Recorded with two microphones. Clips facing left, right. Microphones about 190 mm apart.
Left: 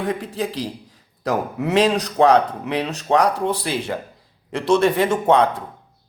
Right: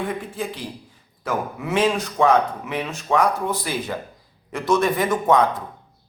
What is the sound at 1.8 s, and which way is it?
Speech, 40° left (ahead or behind).